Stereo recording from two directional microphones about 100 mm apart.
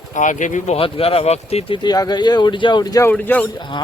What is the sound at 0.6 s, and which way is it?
Speech, 75° left (ahead or behind).